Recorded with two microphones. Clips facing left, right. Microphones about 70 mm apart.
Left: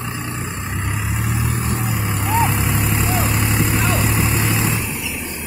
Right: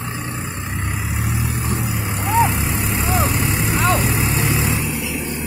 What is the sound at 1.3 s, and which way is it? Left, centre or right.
Vehicle, left.